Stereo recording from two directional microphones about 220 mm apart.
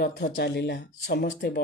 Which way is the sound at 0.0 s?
50° left (ahead or behind).